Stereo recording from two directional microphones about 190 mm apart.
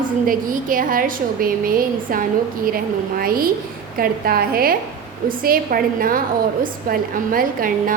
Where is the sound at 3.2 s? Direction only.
50° right (ahead or behind).